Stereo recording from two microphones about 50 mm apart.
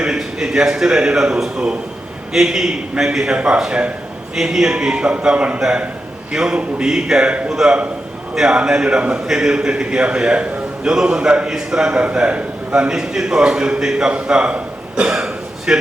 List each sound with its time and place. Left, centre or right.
0.0 s a man's voice: centre
3.3 s a man's voice: right
4.4 s a man's voice: centre
6.3 s a man's voice: centre
9.2 s a man's voice: centre; by 12.9 s right
12.9 s a man's voice: centre
14.5 s throat clearing: centre